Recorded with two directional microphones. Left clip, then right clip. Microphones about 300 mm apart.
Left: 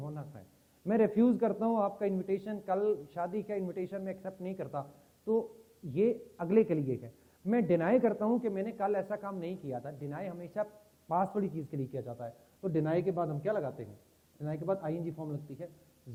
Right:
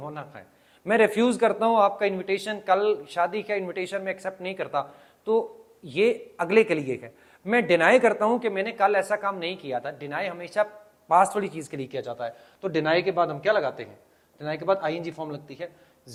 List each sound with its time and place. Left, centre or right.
0.0 s a sound: centre
0.9 s a man's voice: centre
4.8 s speech: right
5.9 s a man's voice: centre